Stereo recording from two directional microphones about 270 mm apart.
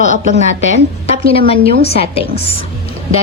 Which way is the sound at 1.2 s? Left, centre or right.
Left.